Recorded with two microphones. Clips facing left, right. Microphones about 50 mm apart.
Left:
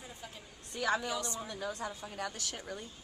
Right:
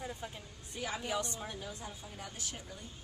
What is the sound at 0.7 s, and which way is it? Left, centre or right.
Speech, left.